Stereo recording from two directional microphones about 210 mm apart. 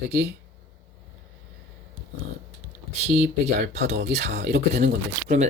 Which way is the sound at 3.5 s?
35° right (ahead or behind).